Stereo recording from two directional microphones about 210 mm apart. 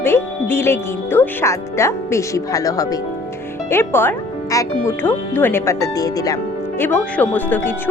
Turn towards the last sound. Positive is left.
turn(degrees=10)  # may be behind; listen again after turning